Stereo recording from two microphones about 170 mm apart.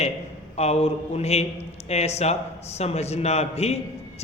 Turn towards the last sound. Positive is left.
turn(degrees=40)  # may be behind; listen again after turning